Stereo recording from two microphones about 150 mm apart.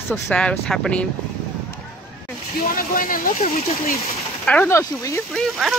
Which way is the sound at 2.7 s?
70° left (ahead or behind).